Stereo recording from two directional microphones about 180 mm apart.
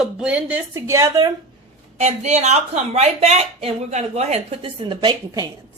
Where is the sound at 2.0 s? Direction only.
40° right (ahead or behind); by 5.5 s 25° right (ahead or behind).